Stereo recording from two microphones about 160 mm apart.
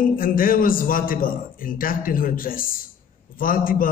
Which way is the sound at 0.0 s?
60° left (ahead or behind).